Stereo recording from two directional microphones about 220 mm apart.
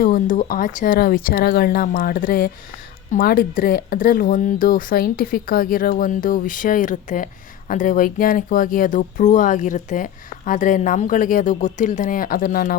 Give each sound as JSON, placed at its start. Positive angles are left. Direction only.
{"t": 0.0, "sound": "speech", "side_deg": 40}